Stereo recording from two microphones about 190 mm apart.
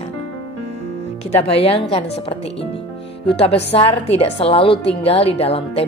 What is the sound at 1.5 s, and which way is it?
A woman's voice, 30° left (ahead or behind).